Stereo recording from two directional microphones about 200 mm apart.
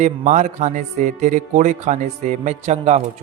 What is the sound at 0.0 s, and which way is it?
A man's voice, 35° right (ahead or behind).